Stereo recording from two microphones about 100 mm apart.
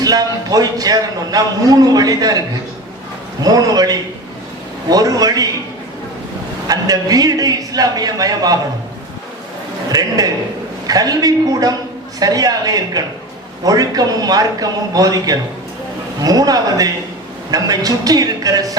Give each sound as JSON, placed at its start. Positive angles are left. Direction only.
{"t": 0.0, "sound": "a man's voice", "side_deg": -40}
{"t": 3.4, "sound": "a man's voice", "side_deg": -40}
{"t": 6.7, "sound": "a man's voice", "side_deg": -40}
{"t": 9.9, "sound": "a man's voice", "side_deg": -40}